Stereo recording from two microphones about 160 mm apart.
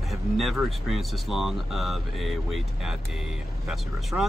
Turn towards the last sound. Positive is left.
turn(degrees=0)  # may be behind; listen again after turning